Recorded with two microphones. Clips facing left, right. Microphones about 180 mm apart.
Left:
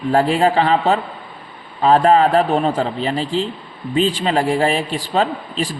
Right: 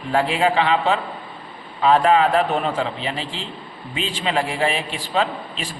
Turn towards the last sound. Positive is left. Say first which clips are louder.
# left 5 dB
turn(degrees=40)  # may be behind; listen again after turning